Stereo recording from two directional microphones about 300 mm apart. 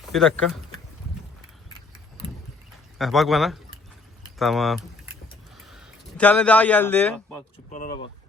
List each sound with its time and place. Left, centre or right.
0.0 s speech: centre
3.0 s a man's voice: centre
7.7 s speech: left